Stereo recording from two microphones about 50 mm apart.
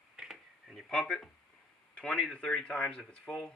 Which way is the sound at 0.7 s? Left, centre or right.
Centre.